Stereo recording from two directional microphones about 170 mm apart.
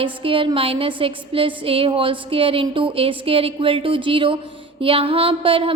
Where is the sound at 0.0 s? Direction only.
30° right (ahead or behind).